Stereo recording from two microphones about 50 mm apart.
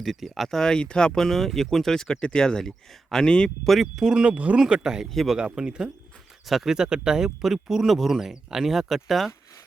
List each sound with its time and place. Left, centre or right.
0.0 s speech: centre
0.5 s speech: centre
3.8 s speech: centre; by 4.6 s right
4.6 s speech: centre
5.4 s speech: centre